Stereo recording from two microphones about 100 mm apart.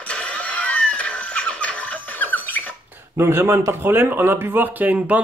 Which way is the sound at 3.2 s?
25° right (ahead or behind).